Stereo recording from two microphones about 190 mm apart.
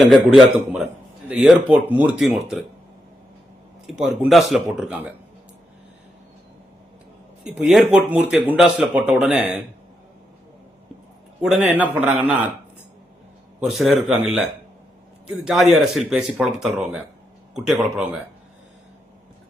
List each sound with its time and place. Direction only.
0.0 s speech: centre (ahead or behind)
3.8 s speech: centre (ahead or behind)
7.4 s speech: 5° right (ahead or behind)
11.4 s a man's voice: 5° right (ahead or behind)
13.6 s speech: centre (ahead or behind)
15.4 s speech: centre (ahead or behind)